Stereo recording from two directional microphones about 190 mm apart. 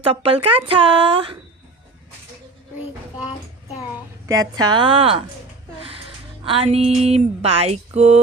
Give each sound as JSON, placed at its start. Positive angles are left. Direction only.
{"t": 0.0, "sound": "a woman's voice", "side_deg": -30}
{"t": 4.3, "sound": "a woman's voice", "side_deg": -20}
{"t": 6.4, "sound": "a sound", "side_deg": -30}